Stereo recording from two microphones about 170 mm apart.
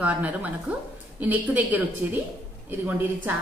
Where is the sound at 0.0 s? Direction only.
10° right (ahead or behind).